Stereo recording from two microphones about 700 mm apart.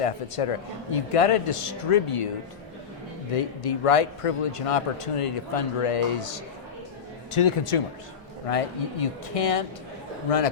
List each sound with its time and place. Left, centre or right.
0.0 s speech: left
3.3 s speech: left
7.3 s speech: left